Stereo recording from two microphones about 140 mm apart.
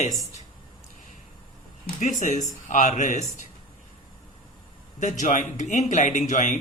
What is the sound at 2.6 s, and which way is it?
Speech, 60° left (ahead or behind).